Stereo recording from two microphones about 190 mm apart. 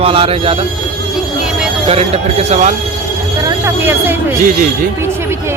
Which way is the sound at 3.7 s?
10° right (ahead or behind).